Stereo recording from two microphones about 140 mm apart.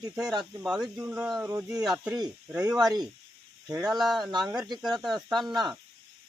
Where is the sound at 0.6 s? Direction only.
5° right (ahead or behind).